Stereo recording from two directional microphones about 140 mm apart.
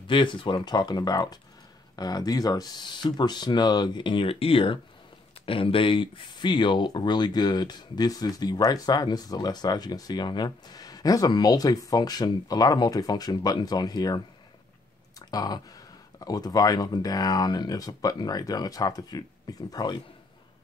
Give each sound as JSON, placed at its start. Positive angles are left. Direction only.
{"t": 0.0, "sound": "speech", "side_deg": 35}